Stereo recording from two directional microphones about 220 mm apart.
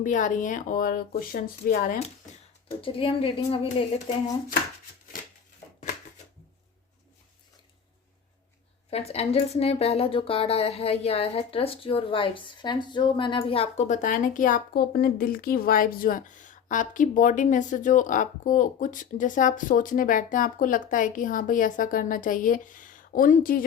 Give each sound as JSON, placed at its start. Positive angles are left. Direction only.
{"t": 0.0, "sound": "speech", "side_deg": 35}
{"t": 2.6, "sound": "speech", "side_deg": 25}
{"t": 8.9, "sound": "speech", "side_deg": 30}